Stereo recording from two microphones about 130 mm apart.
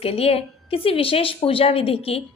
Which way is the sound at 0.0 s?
50° left (ahead or behind).